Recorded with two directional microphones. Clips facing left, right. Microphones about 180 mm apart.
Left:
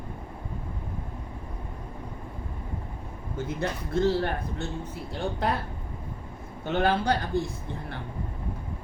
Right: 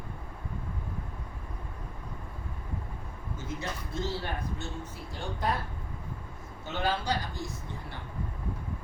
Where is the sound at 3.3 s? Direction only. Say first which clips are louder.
Left 7 dB; 60° left (ahead or behind).